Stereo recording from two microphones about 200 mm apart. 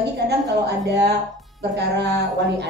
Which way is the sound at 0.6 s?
55° right (ahead or behind).